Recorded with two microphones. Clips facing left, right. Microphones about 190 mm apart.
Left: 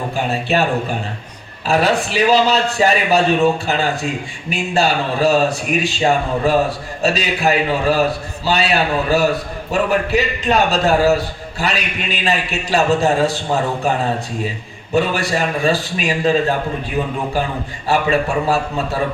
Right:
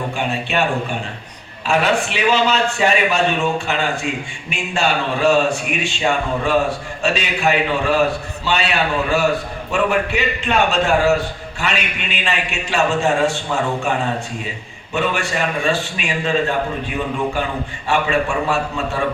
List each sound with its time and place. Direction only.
0.3 s a man's voice: 35° left (ahead or behind)
14.9 s a man's voice: 35° left (ahead or behind)
17.8 s a man's voice: 35° left (ahead or behind)